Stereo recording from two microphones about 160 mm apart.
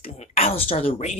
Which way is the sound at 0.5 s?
35° left (ahead or behind).